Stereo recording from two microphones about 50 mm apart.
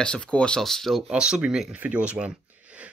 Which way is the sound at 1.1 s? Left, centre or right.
Centre.